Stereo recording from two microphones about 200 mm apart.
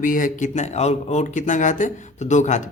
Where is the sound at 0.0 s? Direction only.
40° left (ahead or behind).